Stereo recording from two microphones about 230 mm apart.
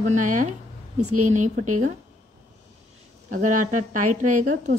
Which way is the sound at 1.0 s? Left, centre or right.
Right.